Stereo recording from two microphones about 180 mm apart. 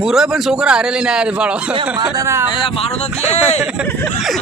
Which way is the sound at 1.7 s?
25° right (ahead or behind).